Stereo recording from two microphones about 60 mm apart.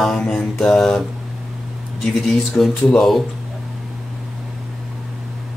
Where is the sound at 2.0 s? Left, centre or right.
Centre.